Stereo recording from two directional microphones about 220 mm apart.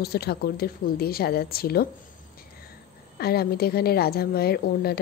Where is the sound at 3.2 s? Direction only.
45° left (ahead or behind).